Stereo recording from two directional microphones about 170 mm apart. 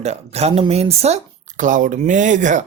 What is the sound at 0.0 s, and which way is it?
Speech, 40° right (ahead or behind).